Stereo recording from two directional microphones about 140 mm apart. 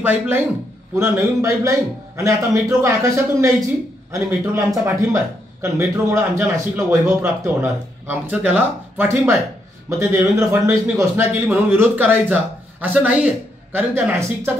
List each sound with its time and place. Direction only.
0.0 s a man's voice: 15° right (ahead or behind)